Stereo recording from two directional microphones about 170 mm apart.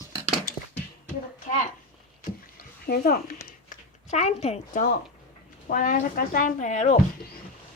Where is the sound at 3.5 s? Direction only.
45° left (ahead or behind).